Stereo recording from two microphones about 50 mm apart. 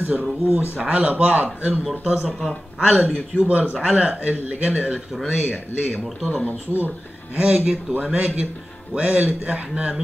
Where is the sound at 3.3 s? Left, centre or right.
Right.